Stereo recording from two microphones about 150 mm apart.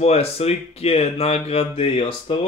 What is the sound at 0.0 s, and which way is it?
A man's voice, 40° left (ahead or behind).